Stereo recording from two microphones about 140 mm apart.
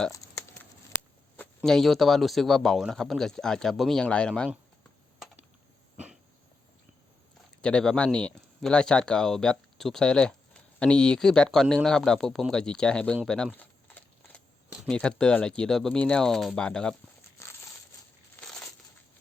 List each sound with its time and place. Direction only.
0.6 s a sound: 10° left (ahead or behind)
1.7 s speech: centre (ahead or behind)
7.6 s speech: 5° left (ahead or behind)
13.2 s a sound: 5° left (ahead or behind)
14.8 s speech: 5° left (ahead or behind)
17.4 s crumpling: 20° left (ahead or behind)
18.3 s crumpling: 5° left (ahead or behind)